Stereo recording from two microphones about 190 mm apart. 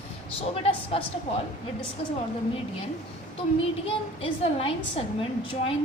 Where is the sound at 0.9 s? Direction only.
30° left (ahead or behind).